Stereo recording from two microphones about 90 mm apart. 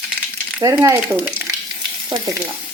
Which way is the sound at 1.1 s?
20° right (ahead or behind).